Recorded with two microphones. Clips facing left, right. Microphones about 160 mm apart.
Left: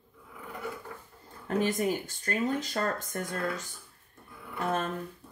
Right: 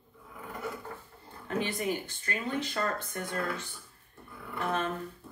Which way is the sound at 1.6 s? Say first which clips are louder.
Left 4 dB; 45° left (ahead or behind).